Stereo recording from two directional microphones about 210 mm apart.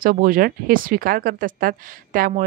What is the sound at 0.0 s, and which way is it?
Speech, 40° right (ahead or behind).